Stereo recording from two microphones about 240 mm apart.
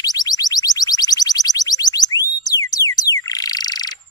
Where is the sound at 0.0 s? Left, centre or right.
Centre.